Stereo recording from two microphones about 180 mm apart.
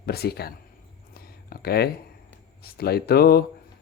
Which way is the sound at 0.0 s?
60° left (ahead or behind).